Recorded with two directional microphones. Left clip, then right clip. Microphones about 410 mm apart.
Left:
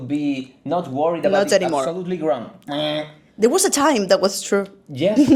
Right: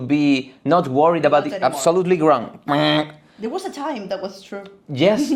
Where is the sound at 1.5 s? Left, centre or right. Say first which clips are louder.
Left 2 dB; left.